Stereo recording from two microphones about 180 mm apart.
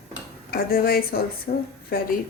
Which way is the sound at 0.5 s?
55° left (ahead or behind).